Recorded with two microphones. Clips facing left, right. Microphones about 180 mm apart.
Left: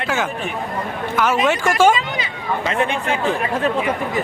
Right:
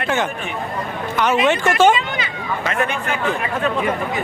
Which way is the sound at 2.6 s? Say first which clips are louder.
Left 1 dB; 30° left (ahead or behind).